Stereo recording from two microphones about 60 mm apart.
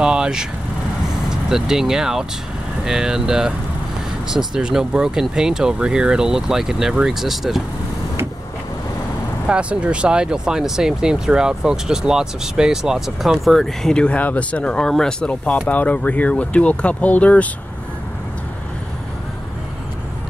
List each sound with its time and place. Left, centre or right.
0.0 s speech: centre
9.5 s speech: centre
15.4 s speech: left